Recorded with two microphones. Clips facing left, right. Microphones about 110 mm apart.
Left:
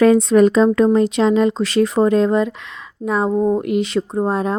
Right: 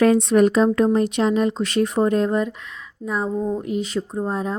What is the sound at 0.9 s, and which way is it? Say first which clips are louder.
A woman's voice: left 4 dB; 90° left.